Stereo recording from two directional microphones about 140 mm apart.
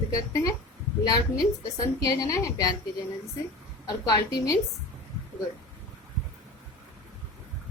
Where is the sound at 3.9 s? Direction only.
30° left (ahead or behind).